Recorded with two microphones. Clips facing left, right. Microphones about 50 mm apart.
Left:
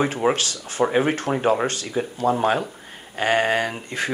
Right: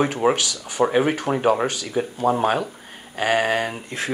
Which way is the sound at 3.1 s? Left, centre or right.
Left.